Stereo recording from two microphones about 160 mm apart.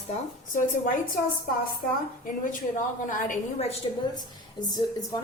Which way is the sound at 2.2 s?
55° left (ahead or behind).